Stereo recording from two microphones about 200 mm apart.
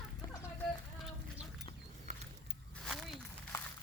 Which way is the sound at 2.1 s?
35° right (ahead or behind).